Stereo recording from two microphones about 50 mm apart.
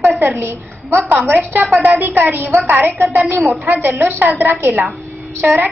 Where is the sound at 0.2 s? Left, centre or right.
Right.